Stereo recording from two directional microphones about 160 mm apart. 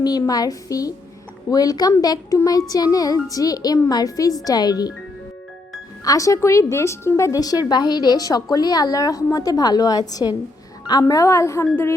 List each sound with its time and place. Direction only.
0.0 s a woman's voice: 25° left (ahead or behind)
6.1 s a woman's voice: 20° left (ahead or behind)